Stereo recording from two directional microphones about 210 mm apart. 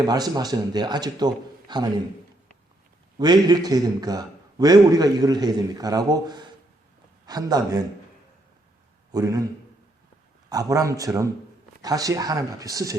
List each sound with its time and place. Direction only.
0.1 s a man's voice: 20° right (ahead or behind)
3.2 s a man's voice: 20° right (ahead or behind)
9.1 s speech: 15° right (ahead or behind)
10.5 s speech: 15° right (ahead or behind)